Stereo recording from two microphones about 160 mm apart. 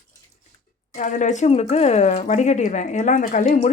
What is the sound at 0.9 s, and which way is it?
Speech, 50° left (ahead or behind).